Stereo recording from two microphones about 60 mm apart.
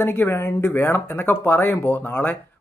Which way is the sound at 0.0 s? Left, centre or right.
Left.